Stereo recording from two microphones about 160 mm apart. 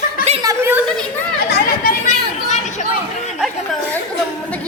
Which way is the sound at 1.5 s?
70° left (ahead or behind).